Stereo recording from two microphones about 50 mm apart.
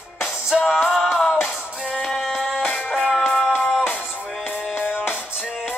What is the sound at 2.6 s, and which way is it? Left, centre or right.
Music, left.